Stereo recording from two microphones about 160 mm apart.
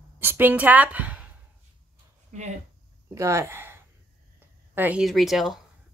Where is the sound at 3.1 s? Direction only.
20° right (ahead or behind).